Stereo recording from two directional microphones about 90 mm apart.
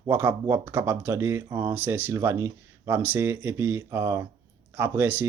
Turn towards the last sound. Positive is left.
turn(degrees=-20)  # may be behind; listen again after turning